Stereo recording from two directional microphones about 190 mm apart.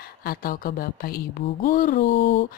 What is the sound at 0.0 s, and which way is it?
A woman's voice, 55° left (ahead or behind).